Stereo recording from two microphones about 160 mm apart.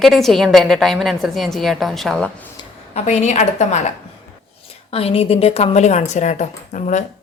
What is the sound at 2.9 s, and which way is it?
Speech, 45° left (ahead or behind).